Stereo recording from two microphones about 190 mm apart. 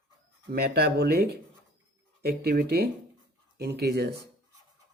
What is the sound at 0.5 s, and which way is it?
Speech, 55° right (ahead or behind).